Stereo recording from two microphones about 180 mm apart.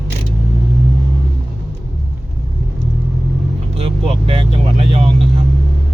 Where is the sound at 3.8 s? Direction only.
35° right (ahead or behind).